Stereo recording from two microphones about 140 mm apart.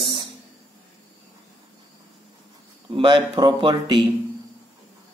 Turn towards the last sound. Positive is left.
turn(degrees=-30)  # may be behind; listen again after turning